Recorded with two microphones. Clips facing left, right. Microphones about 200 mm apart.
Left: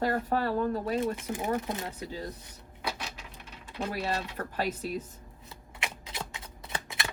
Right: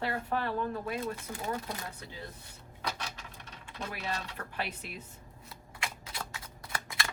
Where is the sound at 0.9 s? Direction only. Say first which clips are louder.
Left 6 dB; 20° left (ahead or behind).